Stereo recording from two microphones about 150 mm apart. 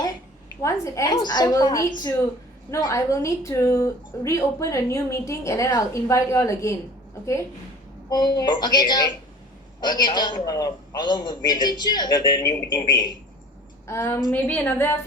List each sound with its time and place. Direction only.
0.0 s a woman's voice: 20° left (ahead or behind)
8.4 s a woman's voice: 30° left (ahead or behind)
13.8 s a woman's voice: 15° left (ahead or behind)